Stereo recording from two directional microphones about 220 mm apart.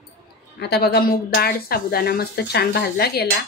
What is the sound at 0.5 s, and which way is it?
Speech, 50° left (ahead or behind).